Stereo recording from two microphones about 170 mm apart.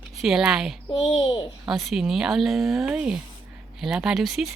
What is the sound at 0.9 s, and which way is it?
Speech, 25° left (ahead or behind).